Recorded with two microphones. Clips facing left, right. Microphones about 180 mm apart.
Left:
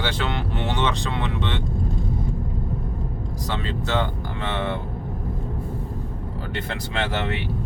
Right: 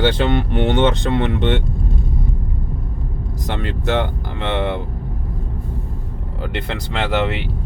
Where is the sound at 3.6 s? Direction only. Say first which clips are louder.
Right 6 dB; 70° right (ahead or behind).